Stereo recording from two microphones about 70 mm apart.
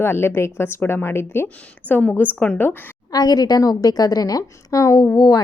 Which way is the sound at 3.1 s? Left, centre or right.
Left.